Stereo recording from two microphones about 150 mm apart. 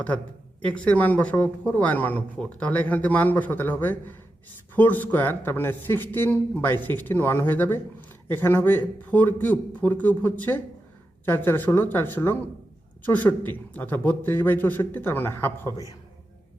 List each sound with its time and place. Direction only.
0.6 s speech: 10° left (ahead or behind)
15.6 s a man's voice: 20° right (ahead or behind)